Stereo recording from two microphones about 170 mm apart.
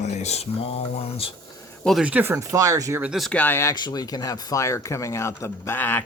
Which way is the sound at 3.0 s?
Centre (ahead or behind).